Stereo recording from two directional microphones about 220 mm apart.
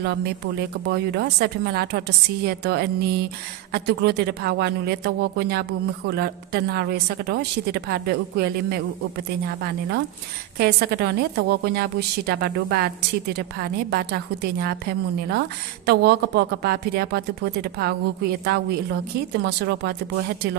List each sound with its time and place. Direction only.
0.0 s a woman's voice: 50° right (ahead or behind)
10.6 s a woman's voice: 45° right (ahead or behind)